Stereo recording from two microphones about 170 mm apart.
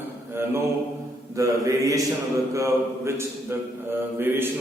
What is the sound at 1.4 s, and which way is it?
A man's voice, 20° right (ahead or behind).